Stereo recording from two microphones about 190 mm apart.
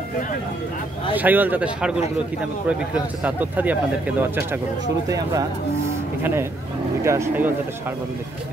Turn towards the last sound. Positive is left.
turn(degrees=-10)  # may be behind; listen again after turning